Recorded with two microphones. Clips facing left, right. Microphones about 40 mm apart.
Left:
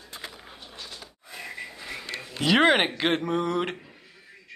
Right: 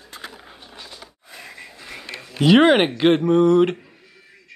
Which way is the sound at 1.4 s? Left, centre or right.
Centre.